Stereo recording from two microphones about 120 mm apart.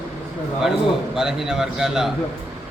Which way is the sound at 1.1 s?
5° right (ahead or behind).